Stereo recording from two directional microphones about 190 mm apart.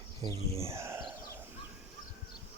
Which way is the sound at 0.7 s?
15° right (ahead or behind).